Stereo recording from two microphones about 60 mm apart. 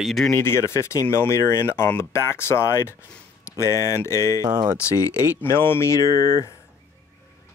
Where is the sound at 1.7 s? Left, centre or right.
Left.